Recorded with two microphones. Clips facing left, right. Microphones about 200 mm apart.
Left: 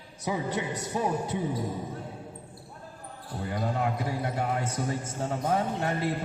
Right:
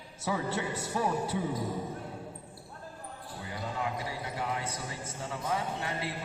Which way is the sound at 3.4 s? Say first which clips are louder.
Left 7 dB; 55° left (ahead or behind).